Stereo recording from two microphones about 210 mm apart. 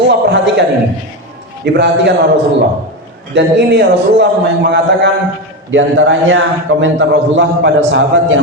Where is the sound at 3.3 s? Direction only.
55° right (ahead or behind).